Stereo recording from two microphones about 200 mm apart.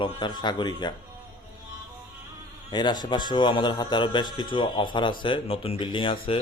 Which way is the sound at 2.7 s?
20° left (ahead or behind).